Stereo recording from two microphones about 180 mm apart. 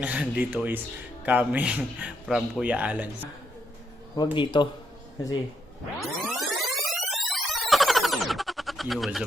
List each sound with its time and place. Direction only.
0.0 s a man's voice: 5° right (ahead or behind)
4.1 s speech: 25° left (ahead or behind)
6.0 s music: centre (ahead or behind)